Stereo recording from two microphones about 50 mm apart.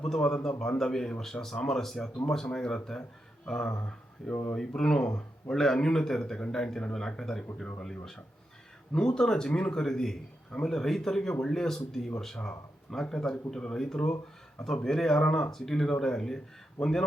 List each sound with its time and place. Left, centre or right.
0.1 s speech: centre